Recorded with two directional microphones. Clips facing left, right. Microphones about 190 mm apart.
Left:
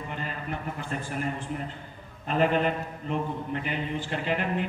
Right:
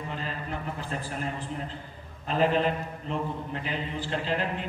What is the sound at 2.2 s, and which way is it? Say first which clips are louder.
A man's voice: even; 30° right (ahead or behind).